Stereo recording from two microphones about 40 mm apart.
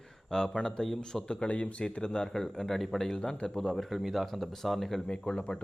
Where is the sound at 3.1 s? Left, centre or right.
Centre.